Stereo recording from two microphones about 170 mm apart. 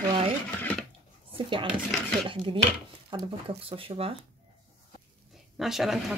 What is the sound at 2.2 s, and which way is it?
Speech, 30° right (ahead or behind).